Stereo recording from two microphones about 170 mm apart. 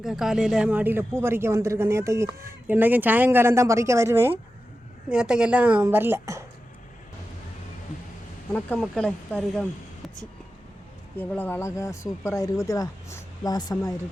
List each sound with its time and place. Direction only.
0.0 s speech: centre (ahead or behind)
8.5 s speech: 5° left (ahead or behind)
11.2 s speech: 10° left (ahead or behind)